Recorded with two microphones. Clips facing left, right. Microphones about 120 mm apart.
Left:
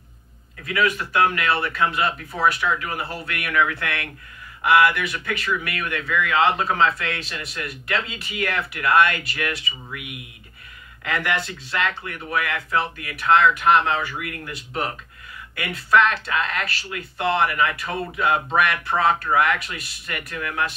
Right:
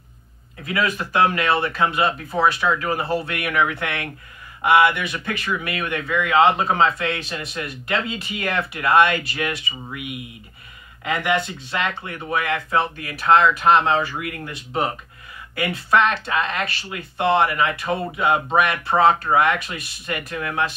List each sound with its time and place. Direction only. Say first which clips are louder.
0.7 s speech: left 1 dB; 30° right (ahead or behind)
11.1 s speech: right 3 dB; 20° right (ahead or behind)